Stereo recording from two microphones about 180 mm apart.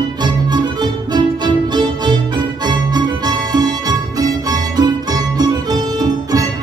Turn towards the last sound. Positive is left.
turn(degrees=-20)  # may be behind; listen again after turning